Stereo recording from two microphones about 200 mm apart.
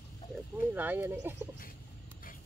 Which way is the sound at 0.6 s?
10° right (ahead or behind).